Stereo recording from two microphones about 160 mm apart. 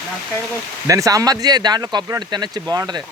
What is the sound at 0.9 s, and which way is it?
Speech, 20° right (ahead or behind).